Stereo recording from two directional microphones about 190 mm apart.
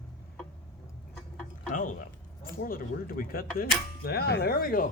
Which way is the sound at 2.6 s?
50° left (ahead or behind).